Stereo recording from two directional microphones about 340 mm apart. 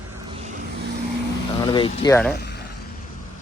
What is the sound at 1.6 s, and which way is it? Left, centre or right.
Speech, centre.